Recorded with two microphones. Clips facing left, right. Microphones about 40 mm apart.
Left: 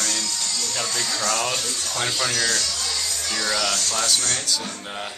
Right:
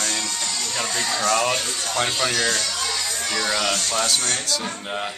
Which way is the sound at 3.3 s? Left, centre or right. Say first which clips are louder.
Right 1 dB; right.